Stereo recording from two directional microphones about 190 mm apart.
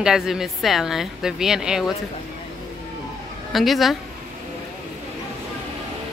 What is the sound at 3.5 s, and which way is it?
Speech, centre (ahead or behind).